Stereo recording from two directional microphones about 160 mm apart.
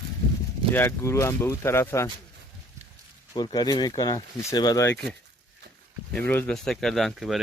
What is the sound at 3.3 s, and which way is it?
Speech, 25° left (ahead or behind).